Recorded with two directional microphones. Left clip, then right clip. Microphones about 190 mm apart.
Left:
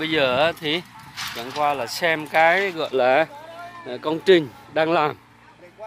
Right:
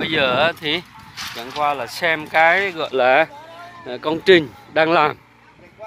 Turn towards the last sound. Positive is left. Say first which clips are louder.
# right 4 dB
turn(degrees=-5)  # may be behind; listen again after turning